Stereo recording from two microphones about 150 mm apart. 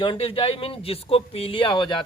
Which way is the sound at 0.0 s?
35° left (ahead or behind).